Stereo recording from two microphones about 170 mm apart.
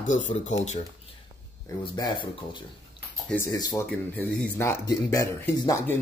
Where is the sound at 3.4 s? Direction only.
20° left (ahead or behind).